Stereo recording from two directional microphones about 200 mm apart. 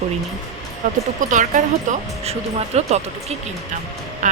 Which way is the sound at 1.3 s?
40° right (ahead or behind).